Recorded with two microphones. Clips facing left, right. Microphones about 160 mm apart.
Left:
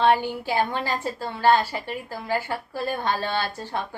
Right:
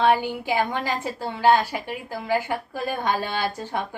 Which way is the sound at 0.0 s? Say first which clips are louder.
Even; 10° right (ahead or behind).